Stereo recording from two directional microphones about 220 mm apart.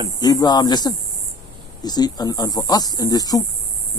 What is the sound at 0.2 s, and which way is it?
A man's voice, 15° left (ahead or behind).